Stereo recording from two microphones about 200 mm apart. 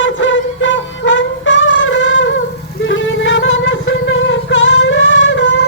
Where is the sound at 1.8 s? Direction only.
70° left (ahead or behind).